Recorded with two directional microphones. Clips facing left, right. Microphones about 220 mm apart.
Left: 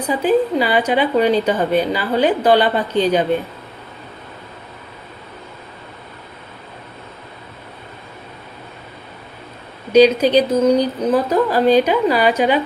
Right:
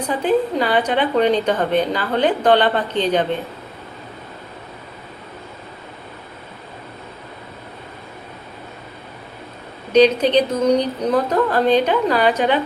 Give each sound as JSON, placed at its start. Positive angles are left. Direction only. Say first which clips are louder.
{"t": 0.1, "sound": "a woman's voice", "louder": "left 3 dB", "side_deg": 10}
{"t": 9.9, "sound": "a woman's voice", "louder": "left 2 dB", "side_deg": 10}